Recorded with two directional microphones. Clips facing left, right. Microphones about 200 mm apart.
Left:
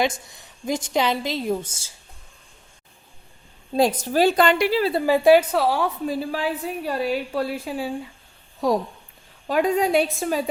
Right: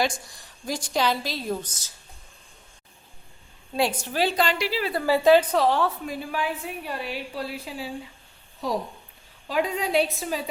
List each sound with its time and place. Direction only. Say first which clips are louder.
0.0 s a woman's voice: left 3 dB; 20° left (ahead or behind)
3.8 s a woman's voice: left 6 dB; 40° left (ahead or behind)
4.8 s a woman's voice: left 6 dB; 30° left (ahead or behind)
5.0 s a woman's voice: left 2 dB; 15° left (ahead or behind)
6.1 s a woman's voice: left 4 dB; 35° left (ahead or behind); by 7.9 s 50° left (ahead or behind)
9.5 s a woman's voice: left 5 dB; 45° left (ahead or behind)